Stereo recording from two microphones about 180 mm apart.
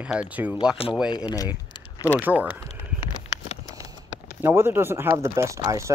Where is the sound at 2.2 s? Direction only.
10° right (ahead or behind).